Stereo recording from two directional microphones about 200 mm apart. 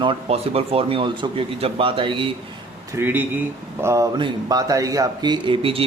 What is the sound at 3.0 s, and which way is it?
Speech, 10° right (ahead or behind).